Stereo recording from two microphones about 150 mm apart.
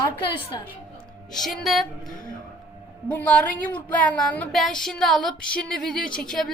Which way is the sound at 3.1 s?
10° left (ahead or behind).